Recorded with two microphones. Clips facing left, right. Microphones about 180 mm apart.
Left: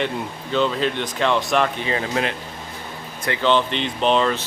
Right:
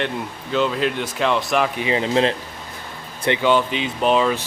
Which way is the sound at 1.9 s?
25° right (ahead or behind).